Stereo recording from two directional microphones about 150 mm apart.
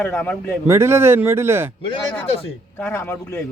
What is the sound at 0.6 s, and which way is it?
Speech, 15° right (ahead or behind).